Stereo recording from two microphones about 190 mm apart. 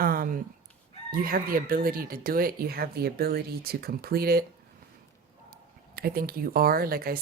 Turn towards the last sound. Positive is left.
turn(degrees=-50)  # may be behind; listen again after turning